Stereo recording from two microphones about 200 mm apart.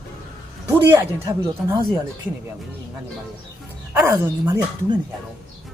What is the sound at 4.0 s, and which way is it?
Speech, 10° right (ahead or behind).